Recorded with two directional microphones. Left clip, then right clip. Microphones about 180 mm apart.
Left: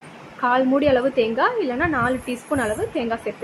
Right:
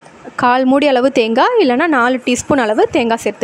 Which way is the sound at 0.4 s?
70° right (ahead or behind).